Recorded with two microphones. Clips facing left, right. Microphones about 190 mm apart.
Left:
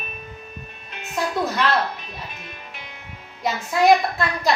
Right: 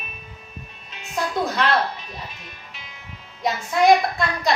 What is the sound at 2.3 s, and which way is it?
Music, 55° left (ahead or behind).